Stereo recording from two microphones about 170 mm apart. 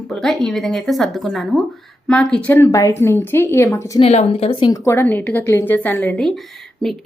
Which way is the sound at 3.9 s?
40° left (ahead or behind).